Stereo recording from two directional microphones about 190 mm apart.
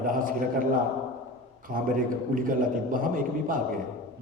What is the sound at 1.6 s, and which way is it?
A man's voice, 45° right (ahead or behind).